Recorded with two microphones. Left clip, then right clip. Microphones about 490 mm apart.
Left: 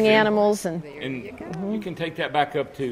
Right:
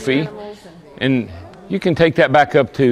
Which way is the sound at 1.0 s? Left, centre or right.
Right.